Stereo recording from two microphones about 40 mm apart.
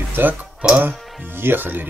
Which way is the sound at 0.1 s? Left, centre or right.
Right.